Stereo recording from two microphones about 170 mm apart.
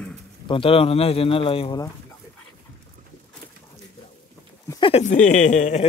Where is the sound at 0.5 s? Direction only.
30° left (ahead or behind).